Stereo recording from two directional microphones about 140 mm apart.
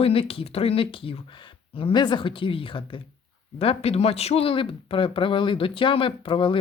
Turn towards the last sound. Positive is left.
turn(degrees=40)  # may be behind; listen again after turning